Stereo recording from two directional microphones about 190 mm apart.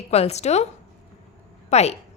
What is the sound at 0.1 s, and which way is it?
Speech, 35° left (ahead or behind).